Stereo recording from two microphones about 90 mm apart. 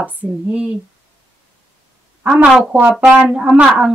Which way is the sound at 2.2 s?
10° right (ahead or behind).